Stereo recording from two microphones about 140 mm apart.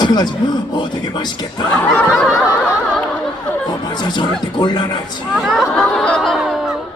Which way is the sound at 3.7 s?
30° left (ahead or behind).